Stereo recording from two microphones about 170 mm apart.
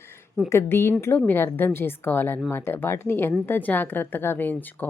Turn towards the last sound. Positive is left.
turn(degrees=10)  # may be behind; listen again after turning